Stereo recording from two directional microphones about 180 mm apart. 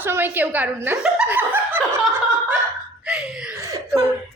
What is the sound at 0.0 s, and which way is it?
Chuckle, 10° right (ahead or behind).